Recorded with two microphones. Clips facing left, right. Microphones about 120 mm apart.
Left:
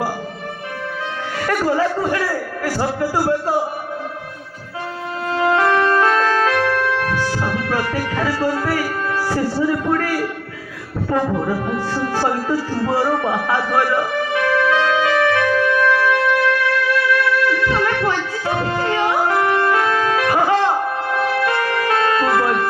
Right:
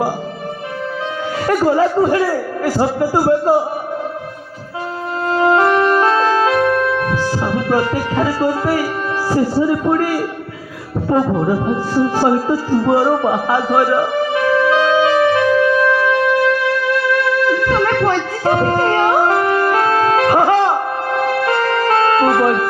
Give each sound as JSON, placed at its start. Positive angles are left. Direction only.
{"t": 1.5, "sound": "a man's voice", "side_deg": -35}
{"t": 5.3, "sound": "music", "side_deg": -30}
{"t": 9.3, "sound": "a man's voice", "side_deg": -25}
{"t": 11.1, "sound": "music", "side_deg": -25}
{"t": 18.1, "sound": "music", "side_deg": -45}
{"t": 21.5, "sound": "music", "side_deg": -50}